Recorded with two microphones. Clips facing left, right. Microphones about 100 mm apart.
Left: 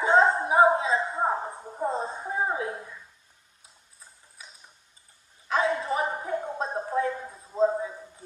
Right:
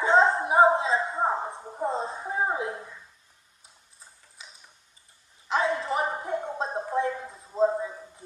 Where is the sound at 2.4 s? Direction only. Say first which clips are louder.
Right 1 dB; 20° right (ahead or behind).